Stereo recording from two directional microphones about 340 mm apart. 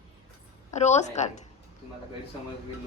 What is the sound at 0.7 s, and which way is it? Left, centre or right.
Speech, centre.